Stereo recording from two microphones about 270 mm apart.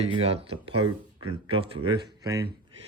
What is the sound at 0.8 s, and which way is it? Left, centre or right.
Speech, right.